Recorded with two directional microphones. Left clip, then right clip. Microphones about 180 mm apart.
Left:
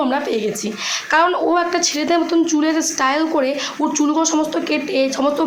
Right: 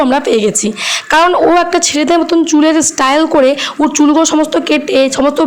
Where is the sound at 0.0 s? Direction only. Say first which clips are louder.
Right 8 dB; 45° right (ahead or behind).